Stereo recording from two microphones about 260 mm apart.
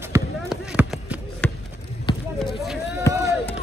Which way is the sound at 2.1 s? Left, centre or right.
Centre.